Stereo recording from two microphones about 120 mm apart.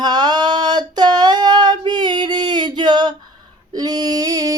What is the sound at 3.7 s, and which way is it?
Female singing, 35° right (ahead or behind).